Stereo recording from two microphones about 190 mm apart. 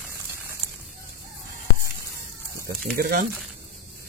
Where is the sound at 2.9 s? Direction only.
50° right (ahead or behind).